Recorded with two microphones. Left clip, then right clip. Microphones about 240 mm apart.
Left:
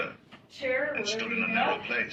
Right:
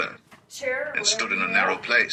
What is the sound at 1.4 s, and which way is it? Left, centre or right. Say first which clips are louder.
Speech: right 5 dB; right.